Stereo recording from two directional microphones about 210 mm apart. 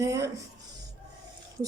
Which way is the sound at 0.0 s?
15° right (ahead or behind).